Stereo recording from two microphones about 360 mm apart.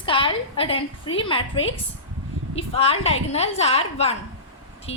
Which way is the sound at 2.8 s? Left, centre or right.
Centre.